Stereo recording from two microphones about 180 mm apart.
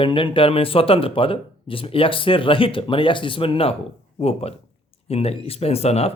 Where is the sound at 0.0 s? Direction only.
30° left (ahead or behind).